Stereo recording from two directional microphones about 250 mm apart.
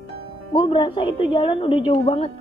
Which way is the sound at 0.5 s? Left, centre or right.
Centre.